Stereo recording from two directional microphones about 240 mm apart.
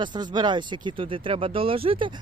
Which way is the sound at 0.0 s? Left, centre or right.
Centre.